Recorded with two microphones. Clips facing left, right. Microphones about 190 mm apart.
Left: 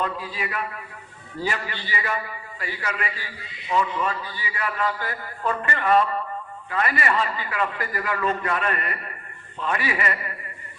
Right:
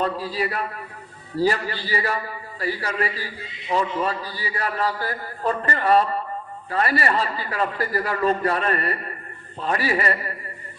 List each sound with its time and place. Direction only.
0.0 s a man's voice: 35° right (ahead or behind)